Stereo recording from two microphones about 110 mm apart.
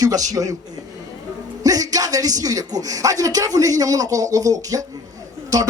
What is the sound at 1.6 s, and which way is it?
Speech, 35° right (ahead or behind).